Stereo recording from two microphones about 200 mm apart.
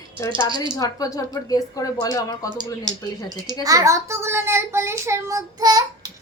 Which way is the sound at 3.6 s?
15° right (ahead or behind).